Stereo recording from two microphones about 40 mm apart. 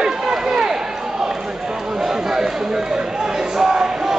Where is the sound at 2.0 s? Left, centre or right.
Centre.